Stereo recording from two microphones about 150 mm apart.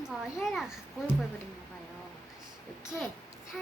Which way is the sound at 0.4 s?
Centre (ahead or behind).